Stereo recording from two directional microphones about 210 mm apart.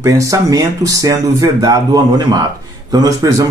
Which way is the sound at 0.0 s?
15° right (ahead or behind).